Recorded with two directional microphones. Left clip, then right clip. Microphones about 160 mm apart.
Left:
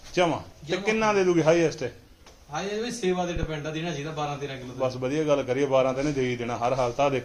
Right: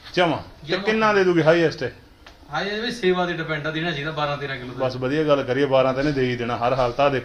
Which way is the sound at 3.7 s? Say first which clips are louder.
Right 6 dB; 25° left (ahead or behind).